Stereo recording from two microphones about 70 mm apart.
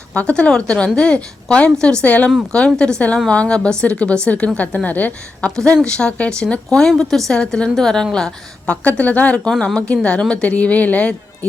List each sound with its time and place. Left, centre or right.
0.1 s a woman's voice: centre